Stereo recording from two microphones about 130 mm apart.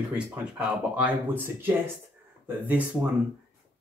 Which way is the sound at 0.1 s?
5° right (ahead or behind).